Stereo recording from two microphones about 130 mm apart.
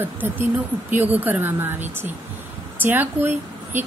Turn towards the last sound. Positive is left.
turn(degrees=-15)  # may be behind; listen again after turning